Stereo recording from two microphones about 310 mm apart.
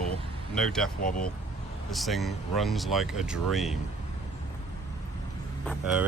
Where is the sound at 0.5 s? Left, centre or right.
Centre.